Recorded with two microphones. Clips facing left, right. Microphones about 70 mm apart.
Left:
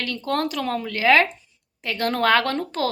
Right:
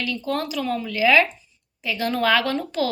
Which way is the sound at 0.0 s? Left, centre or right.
Left.